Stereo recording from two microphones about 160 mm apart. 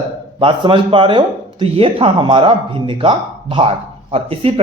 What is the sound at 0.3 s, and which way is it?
Speech, 30° right (ahead or behind).